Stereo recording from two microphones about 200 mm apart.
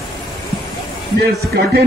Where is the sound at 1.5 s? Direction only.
50° right (ahead or behind).